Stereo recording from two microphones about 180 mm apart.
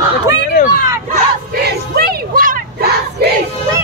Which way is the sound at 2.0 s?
55° right (ahead or behind).